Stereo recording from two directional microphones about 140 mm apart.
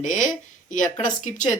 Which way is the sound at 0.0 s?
65° left (ahead or behind).